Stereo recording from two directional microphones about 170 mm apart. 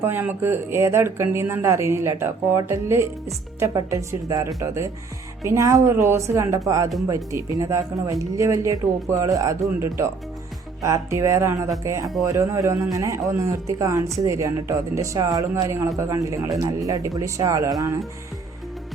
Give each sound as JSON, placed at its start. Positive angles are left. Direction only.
{"t": 0.0, "sound": "speech", "side_deg": -10}